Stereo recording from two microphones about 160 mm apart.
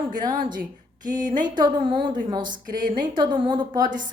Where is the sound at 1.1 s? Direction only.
55° right (ahead or behind).